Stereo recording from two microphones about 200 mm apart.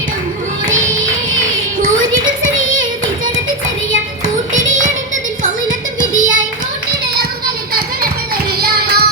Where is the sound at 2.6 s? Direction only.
75° right (ahead or behind).